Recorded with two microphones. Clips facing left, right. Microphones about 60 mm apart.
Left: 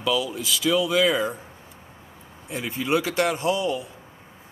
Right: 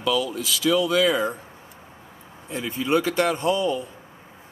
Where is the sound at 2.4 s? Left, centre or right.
Centre.